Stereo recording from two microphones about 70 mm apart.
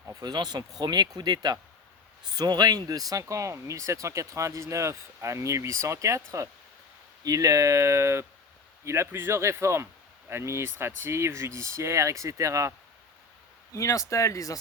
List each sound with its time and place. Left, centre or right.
0.2 s speech: right
7.3 s speech: right
13.7 s speech: left